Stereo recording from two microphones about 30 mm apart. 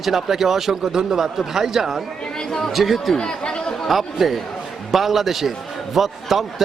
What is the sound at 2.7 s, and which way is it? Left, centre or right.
Speech, centre.